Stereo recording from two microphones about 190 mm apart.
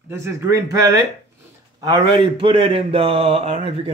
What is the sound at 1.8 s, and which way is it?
Speech, 25° right (ahead or behind).